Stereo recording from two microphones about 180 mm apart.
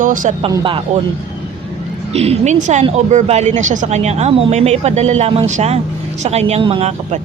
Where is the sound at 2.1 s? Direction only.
35° right (ahead or behind).